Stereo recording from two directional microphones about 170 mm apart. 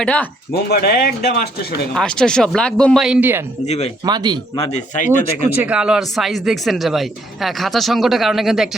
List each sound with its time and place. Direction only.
0.0 s speech: 10° left (ahead or behind)
0.5 s speech: 65° left (ahead or behind)
2.0 s speech: 5° left (ahead or behind)
3.7 s speech: 40° left (ahead or behind)
4.0 s a man's voice: 25° right (ahead or behind)
4.5 s speech: 35° left (ahead or behind)
4.9 s speech: 50° left (ahead or behind)
5.5 s speech: 10° right (ahead or behind)